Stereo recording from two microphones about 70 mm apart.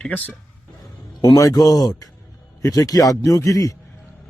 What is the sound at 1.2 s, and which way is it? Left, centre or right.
Speech, left.